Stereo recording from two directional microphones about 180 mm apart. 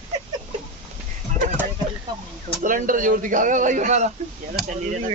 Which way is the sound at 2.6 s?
50° right (ahead or behind).